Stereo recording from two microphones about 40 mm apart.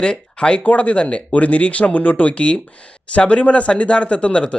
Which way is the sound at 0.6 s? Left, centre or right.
Left.